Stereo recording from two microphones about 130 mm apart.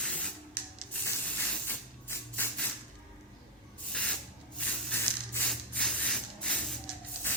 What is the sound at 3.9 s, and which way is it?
Spray, 10° left (ahead or behind).